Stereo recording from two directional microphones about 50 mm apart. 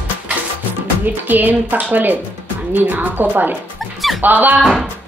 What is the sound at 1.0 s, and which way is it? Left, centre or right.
Speech, right.